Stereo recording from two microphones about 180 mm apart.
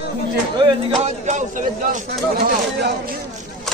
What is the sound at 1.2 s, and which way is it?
Speech, 45° right (ahead or behind).